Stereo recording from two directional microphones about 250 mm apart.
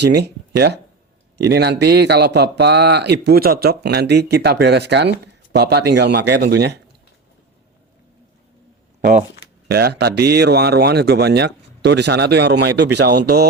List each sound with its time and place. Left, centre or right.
0.0 s speech: right
9.6 s speech: right